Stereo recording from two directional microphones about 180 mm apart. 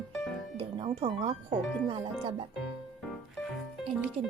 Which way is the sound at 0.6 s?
30° right (ahead or behind).